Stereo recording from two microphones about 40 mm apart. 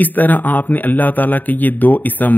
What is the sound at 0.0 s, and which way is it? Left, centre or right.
A man's voice, left.